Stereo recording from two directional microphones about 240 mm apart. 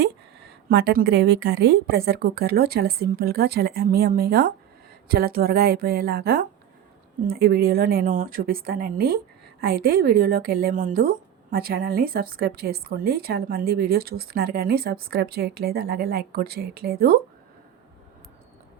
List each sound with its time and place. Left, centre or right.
0.0 s speech: right